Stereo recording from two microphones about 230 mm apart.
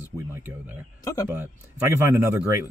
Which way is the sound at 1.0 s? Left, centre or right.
Centre.